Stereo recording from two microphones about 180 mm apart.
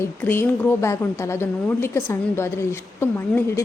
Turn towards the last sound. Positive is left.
turn(degrees=15)  # may be behind; listen again after turning